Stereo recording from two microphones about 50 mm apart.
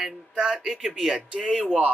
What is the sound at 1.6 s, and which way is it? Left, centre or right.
Speech, right.